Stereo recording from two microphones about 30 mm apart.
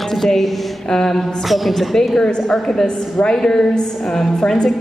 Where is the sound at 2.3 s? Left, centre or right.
Left.